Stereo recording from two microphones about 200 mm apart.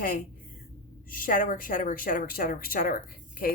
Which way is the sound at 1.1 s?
45° left (ahead or behind).